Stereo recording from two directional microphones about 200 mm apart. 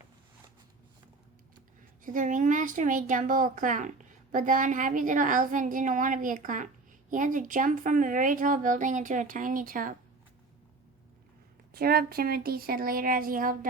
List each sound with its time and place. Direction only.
2.0 s speech: 40° right (ahead or behind)
11.7 s speech: 50° right (ahead or behind)